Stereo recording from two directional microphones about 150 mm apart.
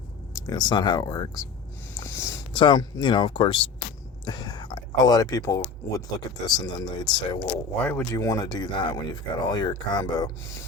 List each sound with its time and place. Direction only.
0.3 s speech: 25° left (ahead or behind)
2.0 s a sound: 20° left (ahead or behind)
2.5 s speech: 30° left (ahead or behind)
7.8 s speech: 10° left (ahead or behind)
8.1 s speech: 25° left (ahead or behind)